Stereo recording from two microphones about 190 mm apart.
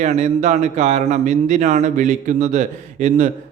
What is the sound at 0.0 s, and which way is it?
Speech, 40° right (ahead or behind).